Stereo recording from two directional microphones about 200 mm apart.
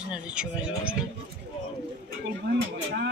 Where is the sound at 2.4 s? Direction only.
55° right (ahead or behind).